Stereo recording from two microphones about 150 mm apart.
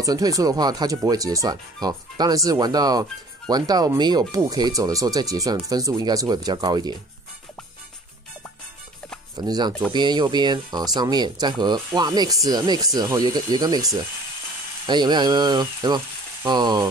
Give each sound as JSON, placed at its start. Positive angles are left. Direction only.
{"t": 0.0, "sound": "speech", "side_deg": -25}
{"t": 9.3, "sound": "speech", "side_deg": -25}